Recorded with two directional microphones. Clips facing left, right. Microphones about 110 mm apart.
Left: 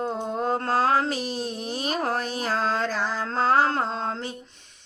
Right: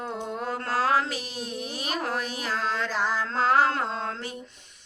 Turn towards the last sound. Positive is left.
turn(degrees=30)  # may be behind; listen again after turning